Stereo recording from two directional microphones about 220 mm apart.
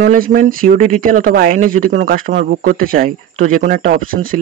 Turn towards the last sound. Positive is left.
turn(degrees=-40)  # may be behind; listen again after turning